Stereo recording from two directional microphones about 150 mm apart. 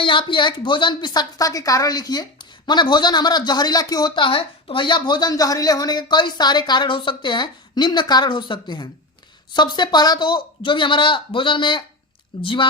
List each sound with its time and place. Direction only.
0.0 s a woman's voice: 35° left (ahead or behind)